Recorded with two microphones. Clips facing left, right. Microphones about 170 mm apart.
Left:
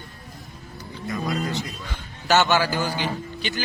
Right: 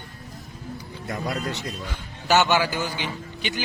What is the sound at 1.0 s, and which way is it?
Speech, 60° right (ahead or behind).